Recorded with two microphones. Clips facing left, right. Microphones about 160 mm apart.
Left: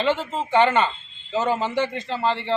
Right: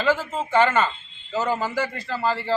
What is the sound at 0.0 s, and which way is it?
Speech, 25° left (ahead or behind).